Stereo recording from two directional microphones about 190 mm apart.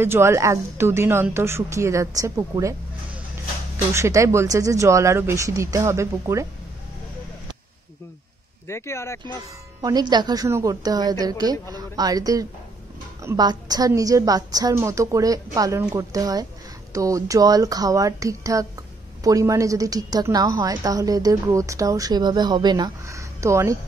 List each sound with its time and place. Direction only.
0.0 s speech: 15° right (ahead or behind)
3.9 s speech: 15° right (ahead or behind)
8.6 s speech: 15° left (ahead or behind)
9.8 s a woman's voice: 20° right (ahead or behind)